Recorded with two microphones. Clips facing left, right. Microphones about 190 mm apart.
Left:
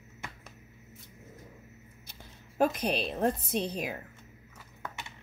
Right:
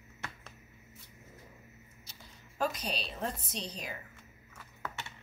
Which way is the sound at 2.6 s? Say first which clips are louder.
Left 7 dB; 55° left (ahead or behind).